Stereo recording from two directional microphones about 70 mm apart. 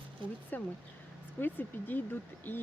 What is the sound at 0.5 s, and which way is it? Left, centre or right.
Speech, left.